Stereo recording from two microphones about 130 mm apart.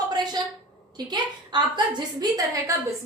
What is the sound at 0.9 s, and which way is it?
A woman's voice, 35° right (ahead or behind).